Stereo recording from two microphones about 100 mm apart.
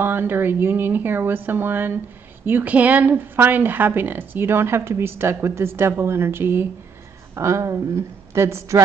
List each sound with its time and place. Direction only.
0.0 s a woman's voice: 20° right (ahead or behind)